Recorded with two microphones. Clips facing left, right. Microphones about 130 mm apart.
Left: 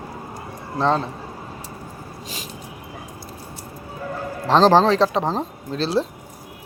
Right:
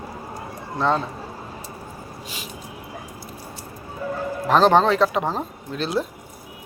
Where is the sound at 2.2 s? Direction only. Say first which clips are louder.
Left 3 dB; 40° left (ahead or behind).